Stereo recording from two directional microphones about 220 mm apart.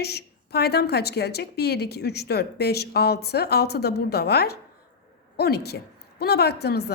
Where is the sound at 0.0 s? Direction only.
45° left (ahead or behind).